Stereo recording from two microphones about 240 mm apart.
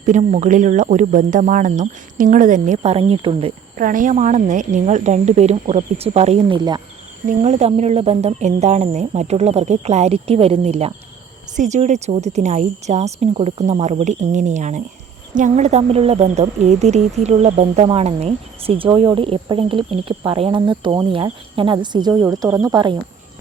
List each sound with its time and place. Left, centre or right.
0.0 s speech: right
3.8 s a woman's voice: right; by 23.0 s centre